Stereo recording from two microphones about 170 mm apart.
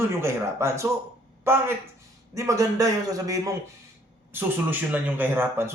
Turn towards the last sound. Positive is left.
turn(degrees=-15)  # may be behind; listen again after turning